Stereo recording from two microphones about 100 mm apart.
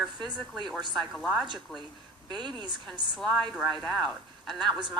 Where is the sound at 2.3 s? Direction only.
50° right (ahead or behind).